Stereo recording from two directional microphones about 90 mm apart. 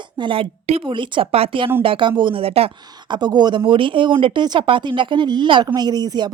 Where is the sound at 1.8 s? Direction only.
70° right (ahead or behind); by 2.7 s 90° right.